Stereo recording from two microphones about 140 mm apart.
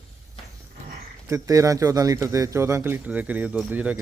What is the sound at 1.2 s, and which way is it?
Speech, 20° right (ahead or behind).